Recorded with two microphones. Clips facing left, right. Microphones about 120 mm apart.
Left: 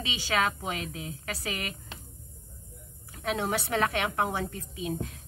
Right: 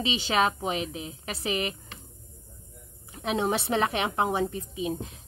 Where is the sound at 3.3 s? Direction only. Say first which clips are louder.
Right 3 dB; 20° right (ahead or behind).